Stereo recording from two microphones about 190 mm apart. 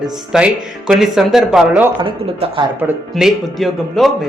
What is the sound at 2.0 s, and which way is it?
Speech, 30° right (ahead or behind).